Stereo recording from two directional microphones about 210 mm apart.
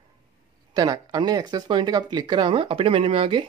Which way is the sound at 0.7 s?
20° right (ahead or behind).